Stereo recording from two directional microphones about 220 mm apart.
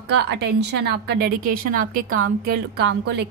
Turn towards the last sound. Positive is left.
turn(degrees=-50)  # may be behind; listen again after turning